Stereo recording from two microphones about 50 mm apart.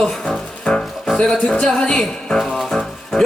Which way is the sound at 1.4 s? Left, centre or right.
Left.